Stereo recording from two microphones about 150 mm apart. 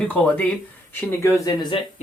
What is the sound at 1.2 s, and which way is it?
Speech, 25° left (ahead or behind).